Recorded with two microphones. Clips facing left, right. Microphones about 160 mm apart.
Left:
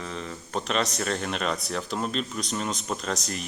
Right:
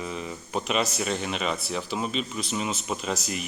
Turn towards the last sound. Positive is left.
turn(degrees=-5)  # may be behind; listen again after turning